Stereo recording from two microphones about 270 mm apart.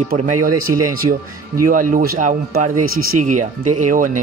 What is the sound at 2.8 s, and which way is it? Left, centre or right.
Speech, right.